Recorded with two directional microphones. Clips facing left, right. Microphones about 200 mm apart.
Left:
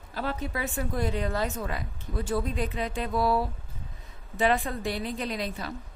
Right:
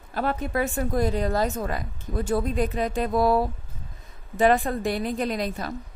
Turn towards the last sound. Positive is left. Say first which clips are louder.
# right 5 dB
turn(degrees=-45)  # may be behind; listen again after turning